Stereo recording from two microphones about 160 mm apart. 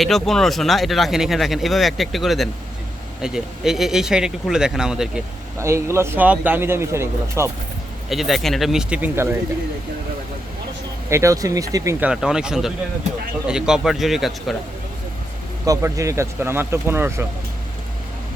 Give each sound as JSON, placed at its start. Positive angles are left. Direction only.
{"t": 0.0, "sound": "speech", "side_deg": 0}
{"t": 5.5, "sound": "speech", "side_deg": -15}
{"t": 8.1, "sound": "speech", "side_deg": 0}
{"t": 11.1, "sound": "speech", "side_deg": -20}
{"t": 11.9, "sound": "speech", "side_deg": -5}
{"t": 15.6, "sound": "speech", "side_deg": -20}